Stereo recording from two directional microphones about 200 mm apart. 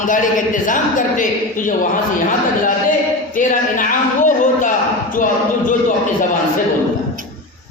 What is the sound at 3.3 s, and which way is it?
A man's voice, 40° left (ahead or behind).